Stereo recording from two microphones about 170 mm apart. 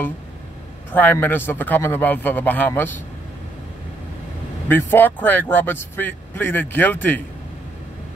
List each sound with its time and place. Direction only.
0.9 s speech: 10° left (ahead or behind)
4.6 s speech: 10° left (ahead or behind)